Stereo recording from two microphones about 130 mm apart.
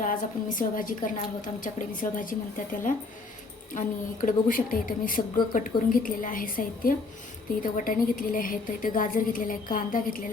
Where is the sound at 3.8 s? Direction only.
90° left.